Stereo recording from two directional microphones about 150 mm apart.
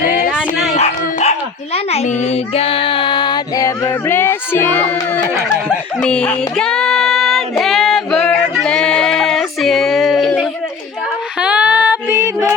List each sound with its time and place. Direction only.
0.0 s dog: 70° left (ahead or behind)
0.3 s dog: 5° right (ahead or behind)
0.8 s speech: 45° left (ahead or behind); by 5.2 s 10° left (ahead or behind)
6.0 s child singing: 5° left (ahead or behind)
11.3 s female singing: 10° right (ahead or behind)